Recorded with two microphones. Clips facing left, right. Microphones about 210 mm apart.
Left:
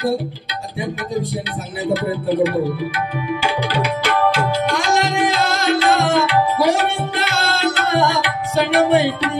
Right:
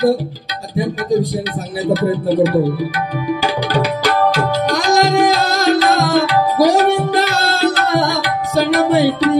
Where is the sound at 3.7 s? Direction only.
40° right (ahead or behind).